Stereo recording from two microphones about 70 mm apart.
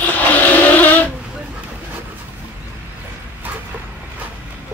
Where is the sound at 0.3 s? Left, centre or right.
Left.